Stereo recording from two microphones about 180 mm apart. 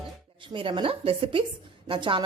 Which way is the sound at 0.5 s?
30° right (ahead or behind).